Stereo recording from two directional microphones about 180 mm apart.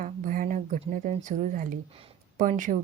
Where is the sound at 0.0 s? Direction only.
45° right (ahead or behind).